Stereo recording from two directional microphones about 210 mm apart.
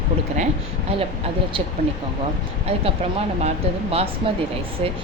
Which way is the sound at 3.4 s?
30° right (ahead or behind).